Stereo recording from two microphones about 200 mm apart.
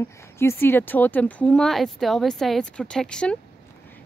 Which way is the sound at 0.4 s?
10° left (ahead or behind).